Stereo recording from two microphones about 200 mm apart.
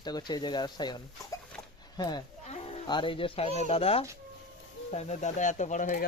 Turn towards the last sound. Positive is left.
turn(degrees=40)  # may be behind; listen again after turning